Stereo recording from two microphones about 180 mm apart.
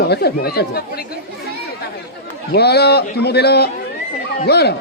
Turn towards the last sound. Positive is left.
turn(degrees=65)  # may be behind; listen again after turning